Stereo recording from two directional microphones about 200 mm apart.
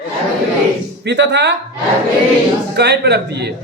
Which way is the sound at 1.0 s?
60° right (ahead or behind).